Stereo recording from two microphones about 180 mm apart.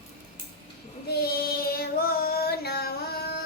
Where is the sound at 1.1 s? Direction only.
60° left (ahead or behind).